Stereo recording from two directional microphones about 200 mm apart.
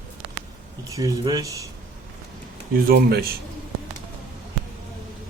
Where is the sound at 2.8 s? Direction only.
50° right (ahead or behind).